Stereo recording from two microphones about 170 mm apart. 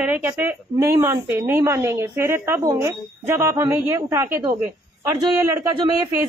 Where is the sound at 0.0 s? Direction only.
10° right (ahead or behind).